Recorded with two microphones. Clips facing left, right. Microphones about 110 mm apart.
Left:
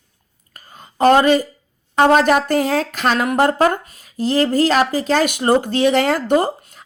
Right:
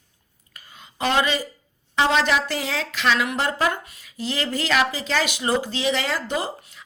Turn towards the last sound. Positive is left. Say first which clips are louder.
# left 10 dB
turn(degrees=50)  # may be behind; listen again after turning